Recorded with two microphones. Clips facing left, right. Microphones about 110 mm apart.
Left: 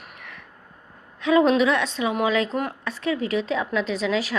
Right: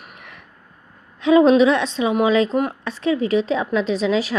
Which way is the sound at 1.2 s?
25° right (ahead or behind).